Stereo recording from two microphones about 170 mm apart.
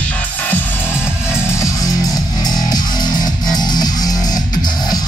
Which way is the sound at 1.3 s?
15° left (ahead or behind).